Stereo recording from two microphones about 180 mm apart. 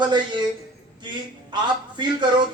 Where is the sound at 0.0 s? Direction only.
25° right (ahead or behind).